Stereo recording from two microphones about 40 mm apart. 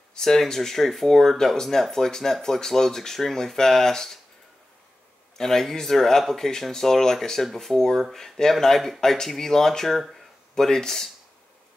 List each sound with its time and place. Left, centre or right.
0.1 s speech: centre
5.4 s speech: centre